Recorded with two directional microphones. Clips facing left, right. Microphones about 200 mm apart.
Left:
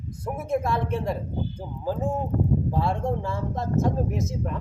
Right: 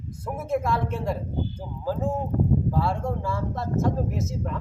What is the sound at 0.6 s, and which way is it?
A man's voice, 15° left (ahead or behind).